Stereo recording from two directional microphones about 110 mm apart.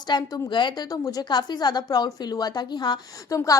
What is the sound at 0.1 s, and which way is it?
A woman's voice, 35° left (ahead or behind).